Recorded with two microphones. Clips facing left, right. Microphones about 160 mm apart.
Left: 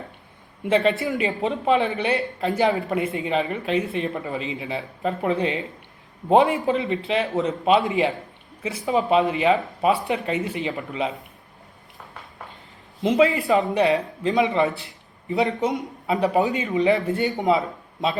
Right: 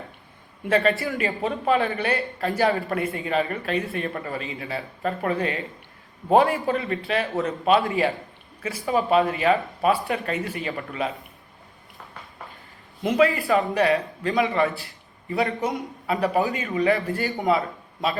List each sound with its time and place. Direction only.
0.6 s a man's voice: 20° left (ahead or behind)
13.0 s a man's voice: 20° left (ahead or behind)